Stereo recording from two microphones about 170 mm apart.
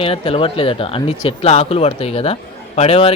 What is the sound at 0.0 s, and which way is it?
Speech, 35° left (ahead or behind).